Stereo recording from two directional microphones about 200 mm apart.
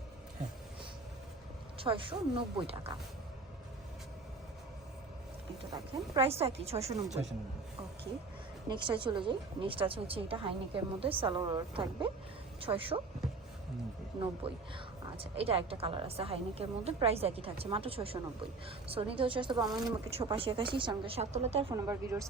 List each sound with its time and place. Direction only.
1.8 s a woman's voice: 25° right (ahead or behind)
5.7 s speech: 25° right (ahead or behind)
8.7 s a woman's voice: 25° right (ahead or behind)
14.4 s a woman's voice: 25° right (ahead or behind)
21.8 s speech: 15° right (ahead or behind)